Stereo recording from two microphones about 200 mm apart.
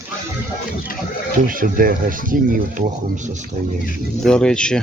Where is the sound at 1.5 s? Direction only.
45° right (ahead or behind).